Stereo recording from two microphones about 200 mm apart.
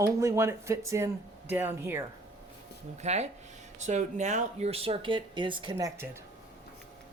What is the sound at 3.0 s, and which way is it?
Speech, 35° right (ahead or behind).